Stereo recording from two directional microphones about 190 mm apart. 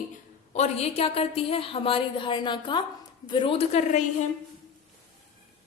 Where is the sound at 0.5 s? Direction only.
35° left (ahead or behind).